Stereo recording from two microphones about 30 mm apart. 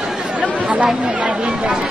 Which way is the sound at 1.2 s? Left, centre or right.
Right.